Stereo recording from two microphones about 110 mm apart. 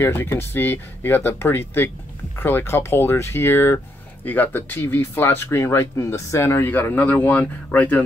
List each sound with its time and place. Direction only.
0.0 s speech: 20° left (ahead or behind)